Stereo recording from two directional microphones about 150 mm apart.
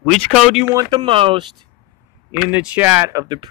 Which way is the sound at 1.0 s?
35° right (ahead or behind).